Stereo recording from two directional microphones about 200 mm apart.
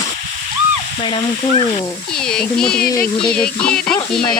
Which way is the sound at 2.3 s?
5° left (ahead or behind).